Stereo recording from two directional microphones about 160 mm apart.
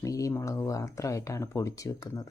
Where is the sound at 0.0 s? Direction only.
20° left (ahead or behind).